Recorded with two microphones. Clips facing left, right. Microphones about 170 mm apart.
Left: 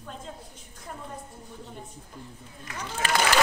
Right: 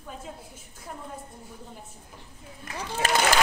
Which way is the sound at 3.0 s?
40° right (ahead or behind).